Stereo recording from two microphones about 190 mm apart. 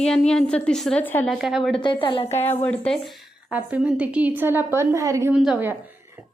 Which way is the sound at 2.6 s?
5° left (ahead or behind).